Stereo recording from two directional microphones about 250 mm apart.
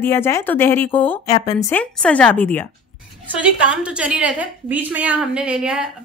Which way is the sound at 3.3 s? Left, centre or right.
Centre.